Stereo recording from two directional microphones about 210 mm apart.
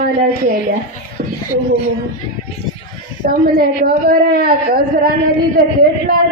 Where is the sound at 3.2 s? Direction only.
45° right (ahead or behind).